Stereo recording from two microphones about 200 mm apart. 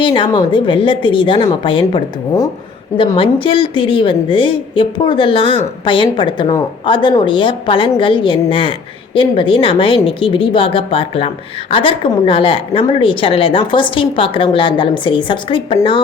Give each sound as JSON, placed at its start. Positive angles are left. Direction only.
{"t": 0.0, "sound": "a woman's voice", "side_deg": 25}
{"t": 3.0, "sound": "a woman's voice", "side_deg": 25}